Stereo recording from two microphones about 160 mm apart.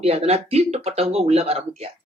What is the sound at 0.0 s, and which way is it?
Speech, 35° right (ahead or behind).